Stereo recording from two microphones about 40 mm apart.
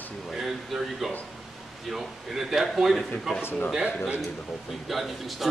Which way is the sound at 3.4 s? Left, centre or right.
Left.